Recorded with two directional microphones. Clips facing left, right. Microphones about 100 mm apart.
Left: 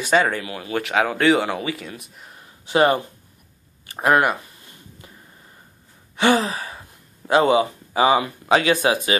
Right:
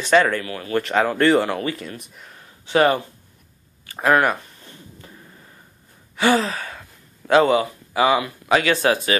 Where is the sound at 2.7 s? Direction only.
25° left (ahead or behind).